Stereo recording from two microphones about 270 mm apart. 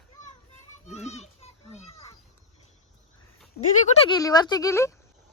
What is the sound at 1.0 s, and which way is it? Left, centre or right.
Children playing, left.